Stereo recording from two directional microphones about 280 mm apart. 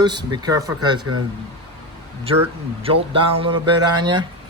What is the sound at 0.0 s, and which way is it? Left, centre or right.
Speech, centre.